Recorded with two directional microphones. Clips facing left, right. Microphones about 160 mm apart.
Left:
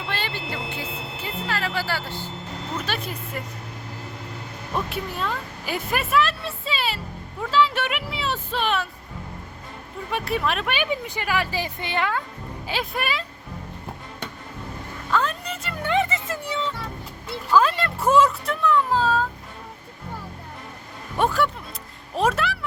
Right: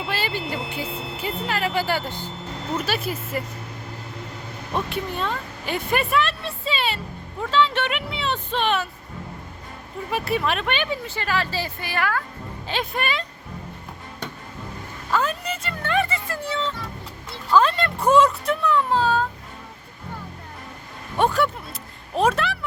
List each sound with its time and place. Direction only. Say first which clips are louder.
0.0 s a sound: right 3 dB; 5° right (ahead or behind)
2.7 s speech: right 4 dB; 5° right (ahead or behind)
4.7 s speech: right 2 dB; 5° left (ahead or behind)
10.1 s speech: right 1 dB; centre (ahead or behind)
10.8 s speech: left 1 dB; 15° left (ahead or behind)
12.6 s speech: right 1 dB; 5° left (ahead or behind)
15.1 s vehicle: right 1 dB; 5° right (ahead or behind)
15.8 s speech: left 1 dB; 20° left (ahead or behind); by 19.2 s centre (ahead or behind)
21.2 s a sound: right 1 dB; centre (ahead or behind)